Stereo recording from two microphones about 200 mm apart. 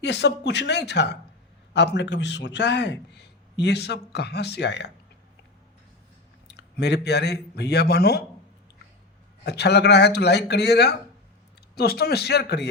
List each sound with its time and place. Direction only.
0.0 s a man's voice: 60° left (ahead or behind)
6.5 s speech: 60° left (ahead or behind)
9.4 s a man's voice: 55° left (ahead or behind)